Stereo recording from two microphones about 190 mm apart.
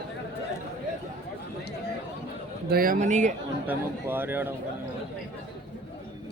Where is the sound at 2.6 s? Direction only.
50° right (ahead or behind).